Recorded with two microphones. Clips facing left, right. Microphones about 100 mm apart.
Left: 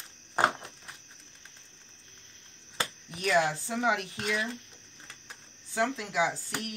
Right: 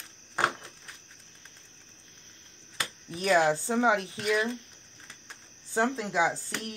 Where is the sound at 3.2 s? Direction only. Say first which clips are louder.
Right 3 dB; 35° right (ahead or behind).